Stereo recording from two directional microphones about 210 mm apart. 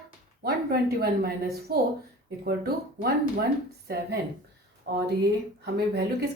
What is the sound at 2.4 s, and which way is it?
Speech, 45° right (ahead or behind).